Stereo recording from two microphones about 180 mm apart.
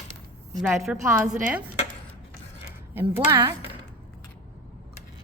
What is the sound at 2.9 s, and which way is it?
Speech, 15° right (ahead or behind).